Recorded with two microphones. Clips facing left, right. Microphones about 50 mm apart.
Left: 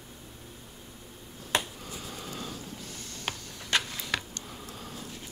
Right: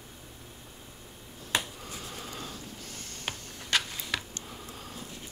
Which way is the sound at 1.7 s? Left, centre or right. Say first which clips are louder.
Left 1 dB; right.